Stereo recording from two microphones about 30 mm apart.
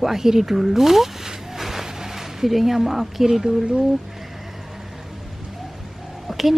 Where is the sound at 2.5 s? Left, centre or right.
Centre.